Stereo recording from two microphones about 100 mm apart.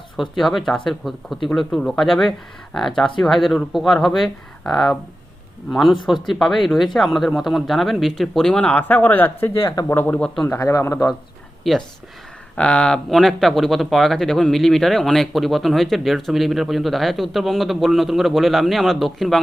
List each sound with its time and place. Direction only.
0.2 s speech: centre (ahead or behind)
10.6 s a man's voice: 30° left (ahead or behind)
11.6 s speech: centre (ahead or behind)